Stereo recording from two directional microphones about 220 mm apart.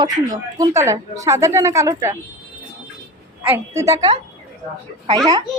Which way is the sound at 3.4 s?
10° right (ahead or behind).